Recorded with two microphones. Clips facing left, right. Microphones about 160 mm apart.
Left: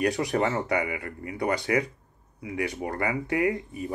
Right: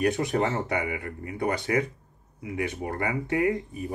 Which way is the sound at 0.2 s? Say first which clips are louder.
Even; 25° right (ahead or behind).